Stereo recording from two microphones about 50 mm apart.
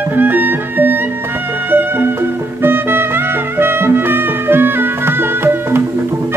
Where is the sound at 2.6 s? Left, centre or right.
Right.